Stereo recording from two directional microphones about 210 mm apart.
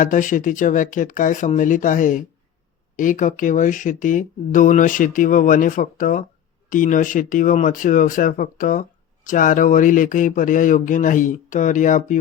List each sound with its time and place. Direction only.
0.0 s speech: 40° left (ahead or behind)